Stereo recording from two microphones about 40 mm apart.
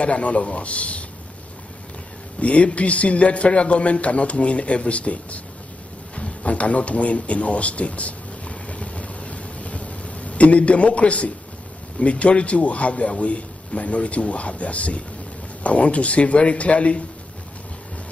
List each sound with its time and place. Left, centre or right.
0.0 s a man's voice: left
2.4 s a man's voice: left
6.1 s a sound: left
12.0 s a man's voice: left